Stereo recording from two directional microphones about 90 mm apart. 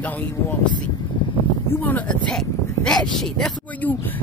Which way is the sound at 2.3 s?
5° left (ahead or behind).